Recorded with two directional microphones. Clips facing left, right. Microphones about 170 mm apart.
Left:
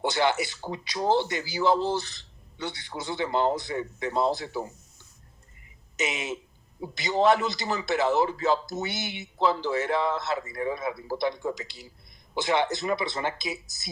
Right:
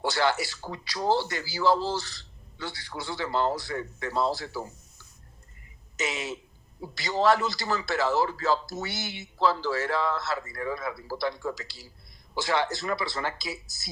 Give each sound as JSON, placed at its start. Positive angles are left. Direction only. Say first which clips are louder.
{"t": 0.0, "sound": "speech", "louder": "left 1 dB", "side_deg": 20}